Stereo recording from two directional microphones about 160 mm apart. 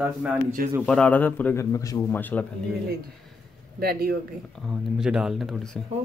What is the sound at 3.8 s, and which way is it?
Speech, 75° right (ahead or behind).